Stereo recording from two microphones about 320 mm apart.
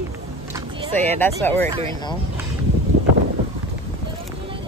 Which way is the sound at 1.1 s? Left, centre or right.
Centre.